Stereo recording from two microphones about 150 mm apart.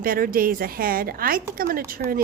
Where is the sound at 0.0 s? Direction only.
70° right (ahead or behind).